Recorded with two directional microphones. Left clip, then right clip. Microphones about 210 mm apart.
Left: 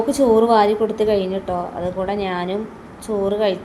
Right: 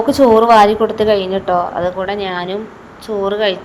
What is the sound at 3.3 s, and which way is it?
Speech, 5° right (ahead or behind).